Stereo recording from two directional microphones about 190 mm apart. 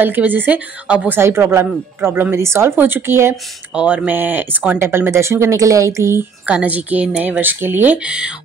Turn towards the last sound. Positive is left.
turn(degrees=-10)  # may be behind; listen again after turning